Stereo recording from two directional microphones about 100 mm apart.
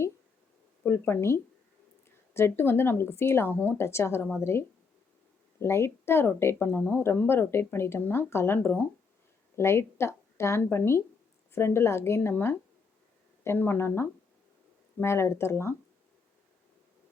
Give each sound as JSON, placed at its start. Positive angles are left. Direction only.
{"t": 0.9, "sound": "a woman's voice", "side_deg": 25}